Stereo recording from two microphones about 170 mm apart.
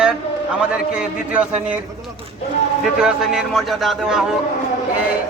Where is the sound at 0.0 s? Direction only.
5° right (ahead or behind).